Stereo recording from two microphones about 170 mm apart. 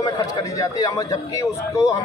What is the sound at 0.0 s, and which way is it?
A man's voice, 20° left (ahead or behind).